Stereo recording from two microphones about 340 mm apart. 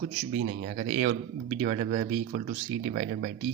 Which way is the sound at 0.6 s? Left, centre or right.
Right.